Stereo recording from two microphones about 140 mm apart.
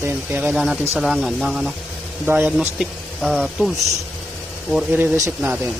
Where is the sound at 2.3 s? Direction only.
15° right (ahead or behind).